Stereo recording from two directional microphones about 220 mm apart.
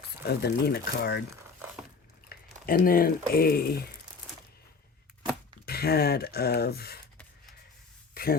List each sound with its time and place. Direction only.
0.3 s speech: 45° left (ahead or behind)
2.3 s speech: 40° left (ahead or behind)
5.6 s speech: 45° left (ahead or behind)
8.1 s a sound: 40° left (ahead or behind)